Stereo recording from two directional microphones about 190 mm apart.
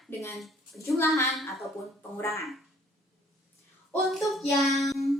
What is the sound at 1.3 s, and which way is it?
Child singing, centre (ahead or behind).